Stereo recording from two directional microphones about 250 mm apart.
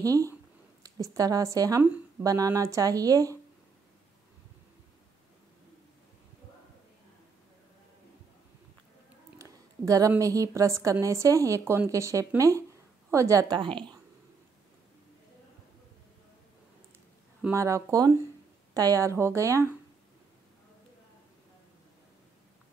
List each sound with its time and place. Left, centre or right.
0.0 s a woman's voice: centre
9.4 s a woman's voice: centre
17.4 s a woman's voice: centre